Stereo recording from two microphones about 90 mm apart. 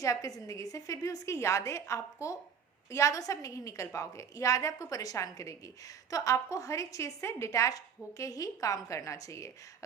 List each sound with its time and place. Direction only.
0.0 s a woman's voice: 40° left (ahead or behind)